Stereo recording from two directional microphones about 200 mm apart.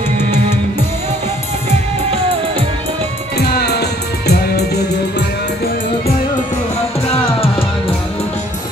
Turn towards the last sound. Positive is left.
turn(degrees=30)  # may be behind; listen again after turning